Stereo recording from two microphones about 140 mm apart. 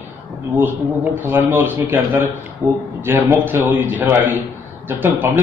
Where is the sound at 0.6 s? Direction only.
15° right (ahead or behind).